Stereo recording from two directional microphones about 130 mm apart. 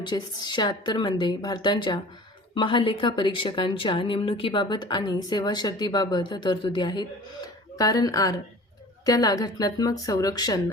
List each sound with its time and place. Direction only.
0.0 s a woman's voice: 35° left (ahead or behind)